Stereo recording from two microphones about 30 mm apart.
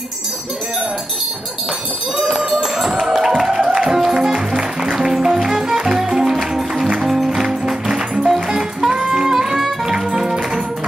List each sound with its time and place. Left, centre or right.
2.3 s music: centre